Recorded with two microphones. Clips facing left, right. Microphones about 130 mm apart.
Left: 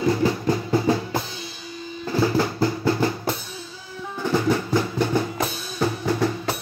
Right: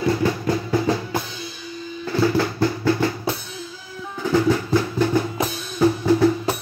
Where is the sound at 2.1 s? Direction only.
20° left (ahead or behind).